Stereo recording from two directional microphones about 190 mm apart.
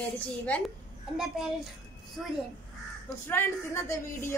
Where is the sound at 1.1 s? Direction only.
Centre (ahead or behind).